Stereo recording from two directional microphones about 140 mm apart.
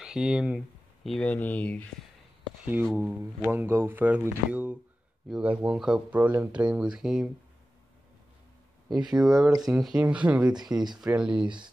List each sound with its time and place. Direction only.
0.0 s speech: 5° right (ahead or behind)
1.0 s speech: 5° left (ahead or behind)
2.6 s speech: 10° right (ahead or behind)
8.8 s speech: 30° right (ahead or behind)
9.7 s speech: 5° right (ahead or behind)
11.3 s speech: 35° right (ahead or behind)